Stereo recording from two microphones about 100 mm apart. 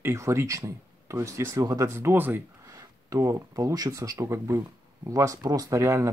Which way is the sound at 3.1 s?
30° right (ahead or behind).